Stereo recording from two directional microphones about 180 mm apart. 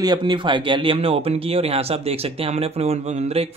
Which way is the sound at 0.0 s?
25° right (ahead or behind).